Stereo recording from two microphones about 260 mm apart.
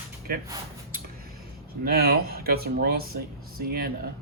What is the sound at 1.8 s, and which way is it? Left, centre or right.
Speech, right.